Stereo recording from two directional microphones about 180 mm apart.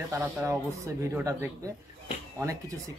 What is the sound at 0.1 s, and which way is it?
Speech, 15° right (ahead or behind).